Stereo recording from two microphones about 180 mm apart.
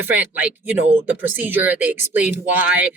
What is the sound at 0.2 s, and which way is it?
Speech, 10° right (ahead or behind).